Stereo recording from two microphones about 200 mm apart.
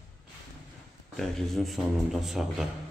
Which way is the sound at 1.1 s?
Centre (ahead or behind).